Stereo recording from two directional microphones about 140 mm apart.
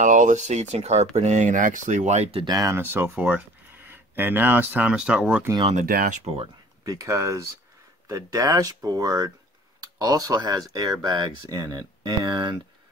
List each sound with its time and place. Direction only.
0.0 s speech: 65° right (ahead or behind)
2.4 s speech: 25° right (ahead or behind); by 5.5 s 10° right (ahead or behind)
5.8 s speech: 80° right
6.2 s speech: 45° right (ahead or behind)
6.8 s speech: 25° right (ahead or behind)